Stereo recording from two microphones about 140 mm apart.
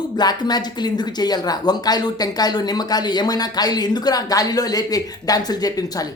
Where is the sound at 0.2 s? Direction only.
30° left (ahead or behind).